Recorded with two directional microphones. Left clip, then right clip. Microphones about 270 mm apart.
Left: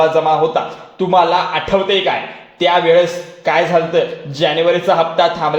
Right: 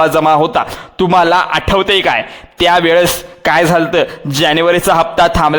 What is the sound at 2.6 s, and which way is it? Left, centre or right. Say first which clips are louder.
Speech: right 2 dB; right.